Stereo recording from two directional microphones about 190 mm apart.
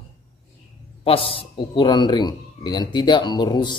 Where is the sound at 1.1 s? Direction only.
30° left (ahead or behind).